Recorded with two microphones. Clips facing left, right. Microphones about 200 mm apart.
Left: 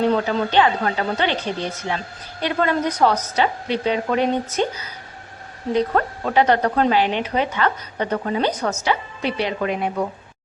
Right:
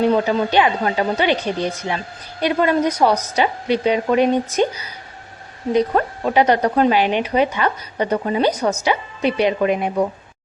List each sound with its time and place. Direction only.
0.0 s speech: 10° right (ahead or behind)
2.4 s speech: 15° right (ahead or behind)